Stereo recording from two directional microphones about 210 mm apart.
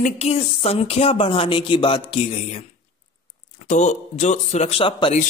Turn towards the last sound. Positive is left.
turn(degrees=30)  # may be behind; listen again after turning